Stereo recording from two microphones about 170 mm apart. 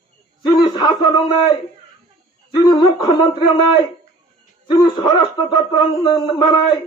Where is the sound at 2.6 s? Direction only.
25° left (ahead or behind).